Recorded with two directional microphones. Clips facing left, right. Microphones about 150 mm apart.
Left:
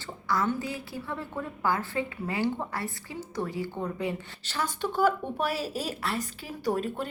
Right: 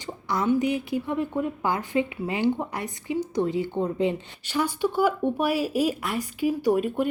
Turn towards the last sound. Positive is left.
turn(degrees=-10)  # may be behind; listen again after turning